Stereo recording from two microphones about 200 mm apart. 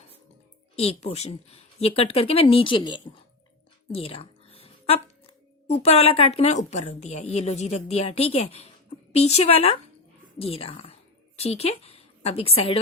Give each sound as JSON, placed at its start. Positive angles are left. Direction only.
{"t": 0.8, "sound": "a woman's voice", "side_deg": 30}